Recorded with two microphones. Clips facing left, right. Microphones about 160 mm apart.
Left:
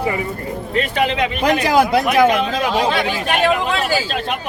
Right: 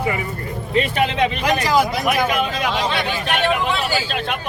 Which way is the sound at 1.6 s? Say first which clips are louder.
Left 4 dB; 60° left (ahead or behind).